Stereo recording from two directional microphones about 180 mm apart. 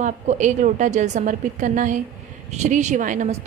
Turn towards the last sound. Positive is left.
turn(degrees=-45)  # may be behind; listen again after turning